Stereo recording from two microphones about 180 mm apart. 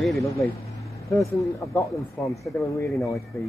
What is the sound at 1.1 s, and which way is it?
Speech, centre (ahead or behind).